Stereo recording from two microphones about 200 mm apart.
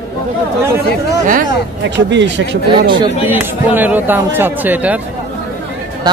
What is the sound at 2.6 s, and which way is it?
Speech, 25° right (ahead or behind).